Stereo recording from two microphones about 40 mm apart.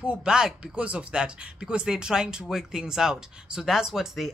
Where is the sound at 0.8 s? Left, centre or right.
Right; by 4.0 s centre.